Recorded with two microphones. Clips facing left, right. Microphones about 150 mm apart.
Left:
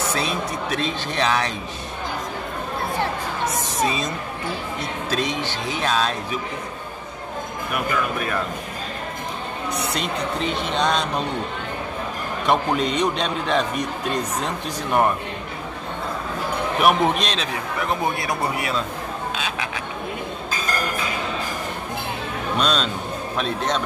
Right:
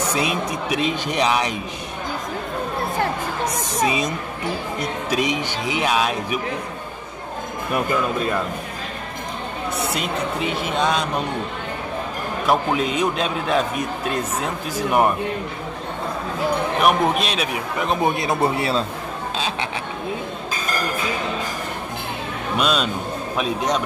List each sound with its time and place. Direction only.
0.0 s speech: 15° right (ahead or behind)
3.8 s speech: 15° right (ahead or behind)
5.1 s speech: 15° right (ahead or behind)
7.7 s speech: 25° right (ahead or behind)
9.8 s a man's voice: 5° right (ahead or behind)
12.4 s a man's voice: 5° right (ahead or behind)
16.8 s speech: centre (ahead or behind); by 18.9 s 30° right (ahead or behind)
22.6 s speech: 5° right (ahead or behind)